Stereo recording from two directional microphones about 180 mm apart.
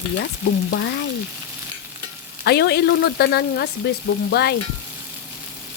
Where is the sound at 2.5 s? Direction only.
65° left (ahead or behind).